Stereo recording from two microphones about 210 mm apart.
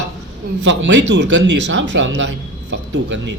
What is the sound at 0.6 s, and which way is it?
Speech, 60° right (ahead or behind).